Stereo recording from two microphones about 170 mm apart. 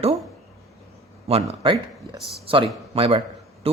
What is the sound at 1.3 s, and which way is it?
Speech, 30° right (ahead or behind).